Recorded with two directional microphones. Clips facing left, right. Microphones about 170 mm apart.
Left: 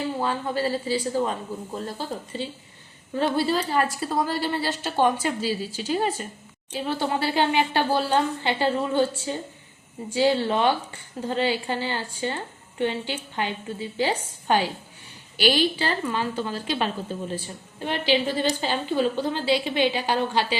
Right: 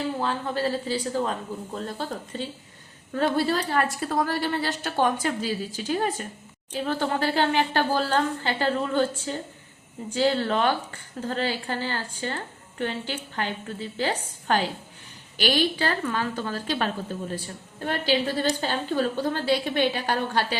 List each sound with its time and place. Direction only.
0.2 s a woman's voice: 10° left (ahead or behind)
5.4 s a woman's voice: 50° right (ahead or behind)
6.7 s a woman's voice: 10° left (ahead or behind)
15.4 s a woman's voice: 50° right (ahead or behind)
15.8 s a woman's voice: 10° left (ahead or behind)
19.3 s a woman's voice: 50° right (ahead or behind)
19.8 s a woman's voice: 10° left (ahead or behind)